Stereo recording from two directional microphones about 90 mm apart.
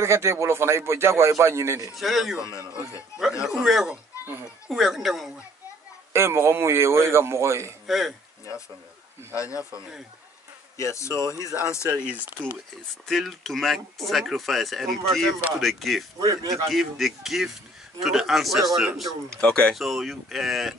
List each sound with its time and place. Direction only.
0.0 s speech: 30° right (ahead or behind)
2.0 s speech: centre (ahead or behind)
2.4 s speech: 35° left (ahead or behind)
3.4 s speech: centre (ahead or behind)
6.1 s speech: 30° right (ahead or behind)
7.8 s speech: centre (ahead or behind)
9.3 s speech: 35° left (ahead or behind)
10.8 s speech: 35° left (ahead or behind)
13.0 s speech: centre (ahead or behind)
16.2 s a man's voice: 45° right (ahead or behind)
16.6 s speech: centre (ahead or behind)
19.7 s speech: centre (ahead or behind)